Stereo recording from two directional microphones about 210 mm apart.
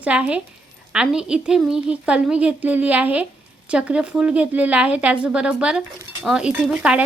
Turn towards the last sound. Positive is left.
turn(degrees=-5)  # may be behind; listen again after turning